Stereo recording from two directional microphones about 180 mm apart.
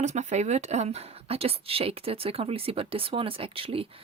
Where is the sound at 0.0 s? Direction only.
40° right (ahead or behind).